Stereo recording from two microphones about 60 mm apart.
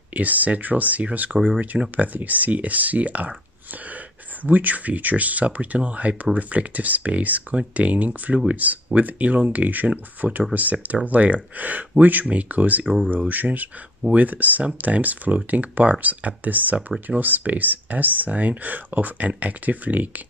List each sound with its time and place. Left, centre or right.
0.1 s speech: right
12.8 s speech: centre
13.1 s speech: right